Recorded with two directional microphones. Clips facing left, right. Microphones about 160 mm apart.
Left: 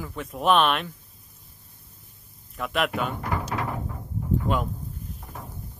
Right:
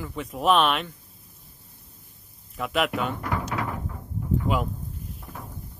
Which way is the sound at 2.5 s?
Centre (ahead or behind).